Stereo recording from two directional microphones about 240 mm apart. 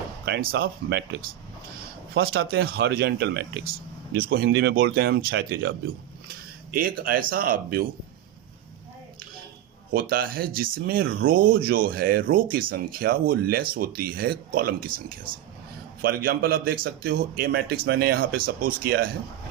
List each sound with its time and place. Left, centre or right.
0.3 s speech: right
2.1 s speech: right
6.7 s speech: right
9.9 s speech: right
11.0 s speech: right
11.3 s speech: right
16.0 s speech: right